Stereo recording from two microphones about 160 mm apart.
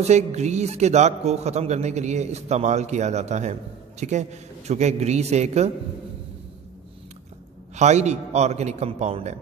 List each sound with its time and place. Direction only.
0.0 s a man's voice: 45° right (ahead or behind)
7.7 s a man's voice: 45° right (ahead or behind)